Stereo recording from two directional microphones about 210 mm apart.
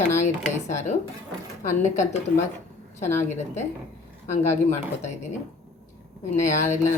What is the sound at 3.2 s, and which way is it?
Speech, 35° left (ahead or behind).